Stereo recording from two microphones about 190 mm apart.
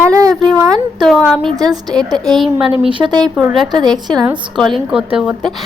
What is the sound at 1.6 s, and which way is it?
Speech, 20° right (ahead or behind).